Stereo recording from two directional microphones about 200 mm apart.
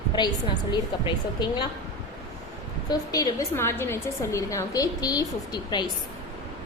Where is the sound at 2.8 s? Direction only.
20° left (ahead or behind).